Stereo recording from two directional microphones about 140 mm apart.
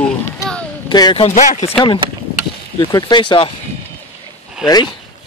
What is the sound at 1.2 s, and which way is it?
Speech, 55° left (ahead or behind).